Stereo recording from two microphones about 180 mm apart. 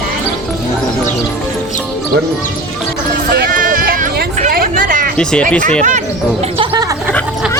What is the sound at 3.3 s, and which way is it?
Sheep, 55° right (ahead or behind).